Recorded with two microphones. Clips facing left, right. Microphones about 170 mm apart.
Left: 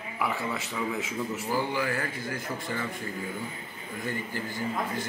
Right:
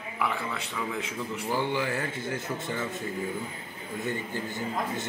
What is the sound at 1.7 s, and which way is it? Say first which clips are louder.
Speech: right 1 dB; 20° right (ahead or behind).